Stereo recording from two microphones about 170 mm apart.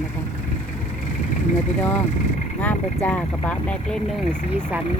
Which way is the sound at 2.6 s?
10° left (ahead or behind).